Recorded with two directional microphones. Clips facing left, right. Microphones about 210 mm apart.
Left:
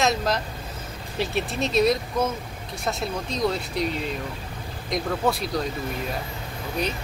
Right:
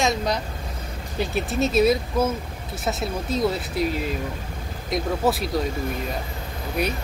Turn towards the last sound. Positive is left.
turn(degrees=-10)  # may be behind; listen again after turning